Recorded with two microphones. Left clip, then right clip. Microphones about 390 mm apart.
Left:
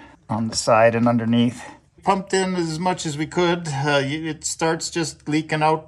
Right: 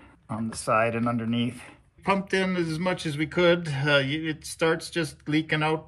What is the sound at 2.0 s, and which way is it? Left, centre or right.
Speech, centre.